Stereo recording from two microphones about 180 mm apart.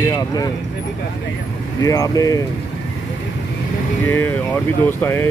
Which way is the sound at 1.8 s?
20° left (ahead or behind).